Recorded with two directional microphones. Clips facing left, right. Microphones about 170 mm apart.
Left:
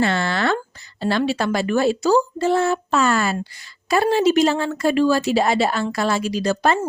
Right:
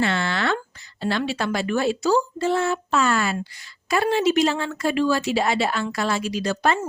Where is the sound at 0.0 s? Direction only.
40° left (ahead or behind).